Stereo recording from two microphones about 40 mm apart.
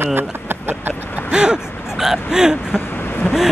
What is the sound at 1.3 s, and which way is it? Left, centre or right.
Speech, right.